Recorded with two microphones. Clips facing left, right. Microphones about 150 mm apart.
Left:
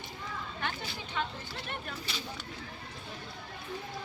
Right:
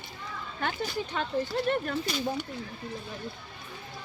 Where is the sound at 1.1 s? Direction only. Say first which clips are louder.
Right 8 dB; 45° right (ahead or behind).